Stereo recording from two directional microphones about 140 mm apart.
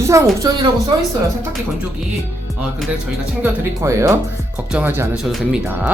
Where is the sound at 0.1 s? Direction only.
25° right (ahead or behind).